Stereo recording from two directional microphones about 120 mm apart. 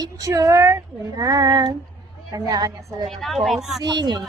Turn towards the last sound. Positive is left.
turn(degrees=-35)  # may be behind; listen again after turning